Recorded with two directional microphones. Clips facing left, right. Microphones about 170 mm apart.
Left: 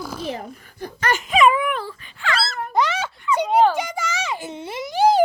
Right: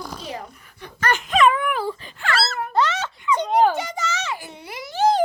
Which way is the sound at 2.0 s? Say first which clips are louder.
Even; 45° right (ahead or behind).